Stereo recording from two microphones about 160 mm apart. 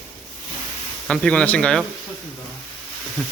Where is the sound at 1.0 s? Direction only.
5° left (ahead or behind).